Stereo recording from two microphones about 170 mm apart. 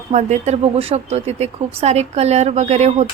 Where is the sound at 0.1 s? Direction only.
45° right (ahead or behind).